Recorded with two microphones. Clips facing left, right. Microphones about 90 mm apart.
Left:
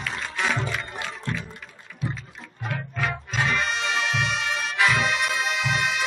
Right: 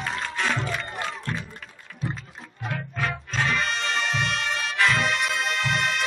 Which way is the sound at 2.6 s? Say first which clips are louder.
Even; centre (ahead or behind).